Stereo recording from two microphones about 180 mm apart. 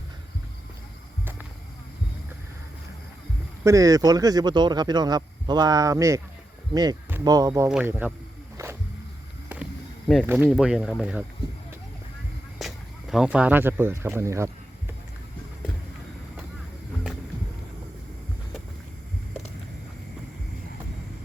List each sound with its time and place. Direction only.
1.2 s music: 10° right (ahead or behind)
3.6 s speech: 15° right (ahead or behind)
10.3 s speech: 5° right (ahead or behind)
12.5 s speech: centre (ahead or behind)